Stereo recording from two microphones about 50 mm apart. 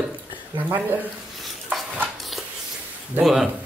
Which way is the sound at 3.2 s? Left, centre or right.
Centre.